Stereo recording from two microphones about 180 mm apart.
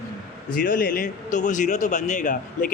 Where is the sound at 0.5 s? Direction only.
50° left (ahead or behind).